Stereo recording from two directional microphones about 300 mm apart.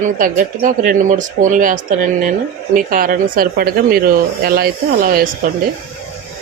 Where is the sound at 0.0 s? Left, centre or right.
Right.